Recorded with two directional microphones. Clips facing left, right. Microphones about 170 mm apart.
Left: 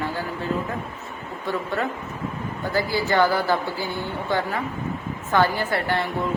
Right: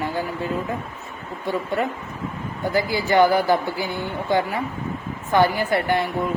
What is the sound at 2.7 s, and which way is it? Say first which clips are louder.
A woman's voice: right 3 dB; 15° right (ahead or behind).